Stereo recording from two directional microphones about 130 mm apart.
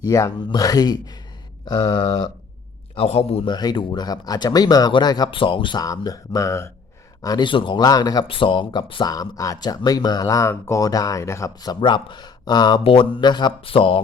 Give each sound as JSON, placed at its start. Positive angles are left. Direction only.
{"t": 0.0, "sound": "speech", "side_deg": 25}
{"t": 2.9, "sound": "speech", "side_deg": 50}
{"t": 3.5, "sound": "speech", "side_deg": 35}
{"t": 12.8, "sound": "speech", "side_deg": 45}